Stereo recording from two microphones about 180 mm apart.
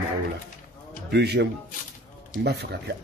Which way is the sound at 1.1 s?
65° right (ahead or behind).